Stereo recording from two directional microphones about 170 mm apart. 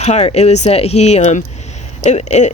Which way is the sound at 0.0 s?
40° left (ahead or behind).